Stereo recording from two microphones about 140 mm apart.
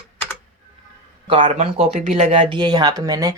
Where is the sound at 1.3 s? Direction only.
45° right (ahead or behind).